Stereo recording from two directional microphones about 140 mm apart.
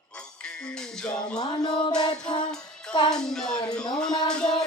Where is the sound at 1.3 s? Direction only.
30° left (ahead or behind).